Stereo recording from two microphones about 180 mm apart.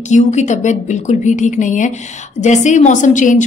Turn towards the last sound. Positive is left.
turn(degrees=45)  # may be behind; listen again after turning